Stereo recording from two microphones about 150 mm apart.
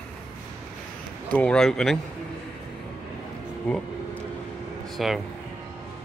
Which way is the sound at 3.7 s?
10° left (ahead or behind).